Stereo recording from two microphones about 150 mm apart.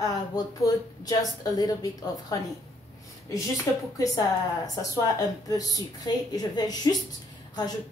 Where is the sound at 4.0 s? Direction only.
25° left (ahead or behind).